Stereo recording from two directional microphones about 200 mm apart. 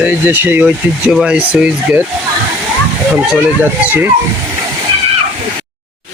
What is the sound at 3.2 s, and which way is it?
Speech, 10° right (ahead or behind).